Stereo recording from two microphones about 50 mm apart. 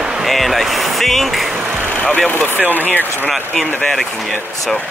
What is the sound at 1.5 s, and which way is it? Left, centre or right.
Vehicle, right.